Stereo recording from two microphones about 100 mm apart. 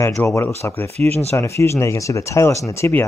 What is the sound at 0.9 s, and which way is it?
Speech, 90° right.